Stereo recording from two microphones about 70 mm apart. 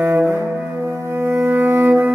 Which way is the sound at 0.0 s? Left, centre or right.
Right.